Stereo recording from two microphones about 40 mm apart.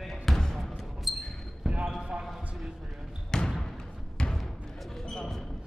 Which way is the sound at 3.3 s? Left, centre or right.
Centre.